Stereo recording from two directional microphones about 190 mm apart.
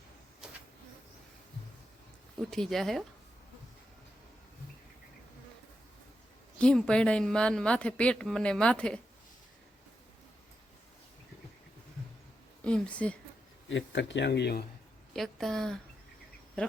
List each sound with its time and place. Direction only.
0.4 s insect: 5° right (ahead or behind)
2.4 s speech: centre (ahead or behind)
6.6 s speech: 5° left (ahead or behind)
12.6 s speech: 5° left (ahead or behind)
13.7 s speech: 70° left (ahead or behind)
15.1 s speech: centre (ahead or behind)